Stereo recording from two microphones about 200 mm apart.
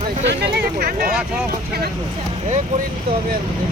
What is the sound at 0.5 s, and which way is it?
Speech, 50° right (ahead or behind).